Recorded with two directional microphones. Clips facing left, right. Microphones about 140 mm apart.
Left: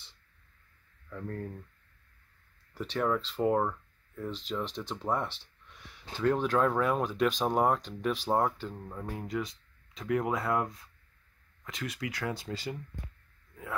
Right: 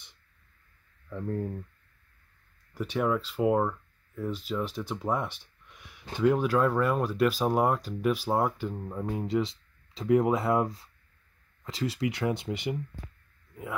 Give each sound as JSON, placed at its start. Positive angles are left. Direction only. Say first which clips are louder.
{"t": 1.1, "sound": "speech", "louder": "right 6 dB", "side_deg": -20}
{"t": 2.7, "sound": "speech", "louder": "right 2 dB", "side_deg": -10}